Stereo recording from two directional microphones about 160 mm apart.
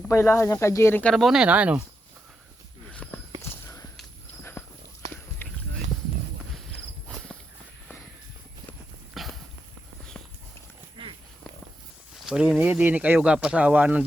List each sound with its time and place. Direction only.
0.1 s speech: 15° left (ahead or behind)
1.1 s speech: centre (ahead or behind)
2.9 s walk: 10° left (ahead or behind)
4.6 s walk: 15° left (ahead or behind)
5.4 s a sound: 10° left (ahead or behind)
9.2 s a sound: centre (ahead or behind)
12.2 s speech: 5° right (ahead or behind)